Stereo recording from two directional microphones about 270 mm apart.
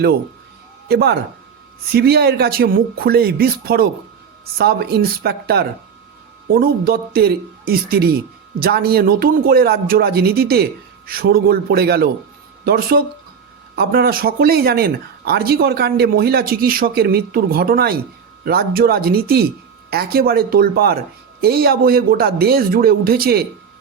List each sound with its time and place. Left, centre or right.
0.9 s speech: right